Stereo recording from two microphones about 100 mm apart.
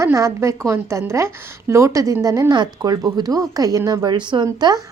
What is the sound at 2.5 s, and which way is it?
A woman's voice, 45° right (ahead or behind).